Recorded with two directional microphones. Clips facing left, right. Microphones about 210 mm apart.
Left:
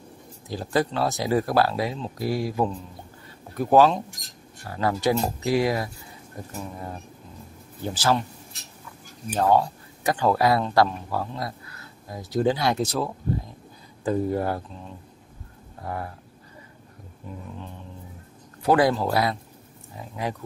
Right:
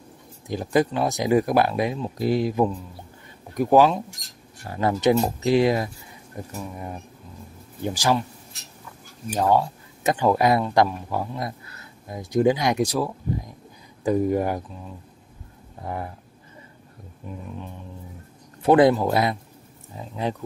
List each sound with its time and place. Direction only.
0.5 s speech: 20° right (ahead or behind)
7.8 s speech: 15° right (ahead or behind)
9.3 s speech: 10° right (ahead or behind)
15.8 s speech: 20° right (ahead or behind)
17.3 s speech: 15° right (ahead or behind)
18.6 s speech: 20° right (ahead or behind)